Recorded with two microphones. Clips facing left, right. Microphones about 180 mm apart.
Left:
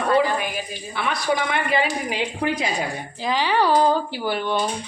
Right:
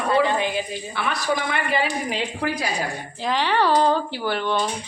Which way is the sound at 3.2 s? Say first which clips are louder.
Even; 5° left (ahead or behind).